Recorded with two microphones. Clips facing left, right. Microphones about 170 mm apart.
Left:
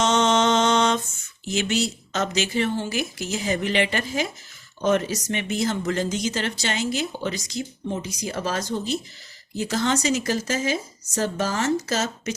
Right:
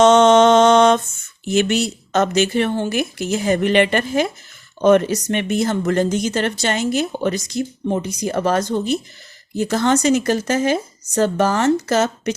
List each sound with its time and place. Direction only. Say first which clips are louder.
0.0 s mantra: right 9 dB; 60° right (ahead or behind)
1.5 s speech: right 6 dB; 55° right (ahead or behind)